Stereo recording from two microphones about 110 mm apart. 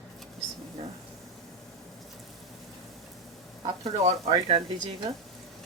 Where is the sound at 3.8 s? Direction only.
65° right (ahead or behind).